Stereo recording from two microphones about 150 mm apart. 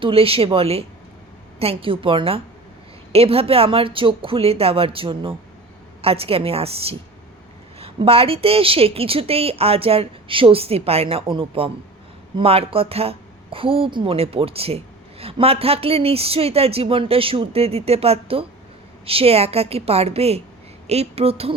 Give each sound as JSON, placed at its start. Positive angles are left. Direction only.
{"t": 0.0, "sound": "a woman's voice", "side_deg": -40}